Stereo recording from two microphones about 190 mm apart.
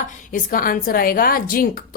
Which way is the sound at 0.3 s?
45° left (ahead or behind).